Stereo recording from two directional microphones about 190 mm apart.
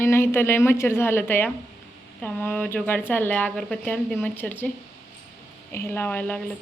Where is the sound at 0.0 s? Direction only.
15° left (ahead or behind).